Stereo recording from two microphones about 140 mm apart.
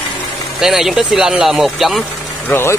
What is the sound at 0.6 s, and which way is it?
Speech, 5° right (ahead or behind).